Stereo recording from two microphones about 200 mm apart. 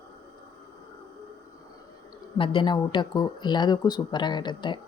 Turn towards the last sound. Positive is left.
turn(degrees=20)  # may be behind; listen again after turning